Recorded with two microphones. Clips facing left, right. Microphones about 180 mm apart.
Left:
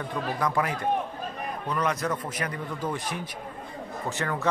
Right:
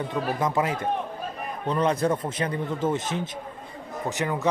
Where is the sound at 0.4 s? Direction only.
20° right (ahead or behind).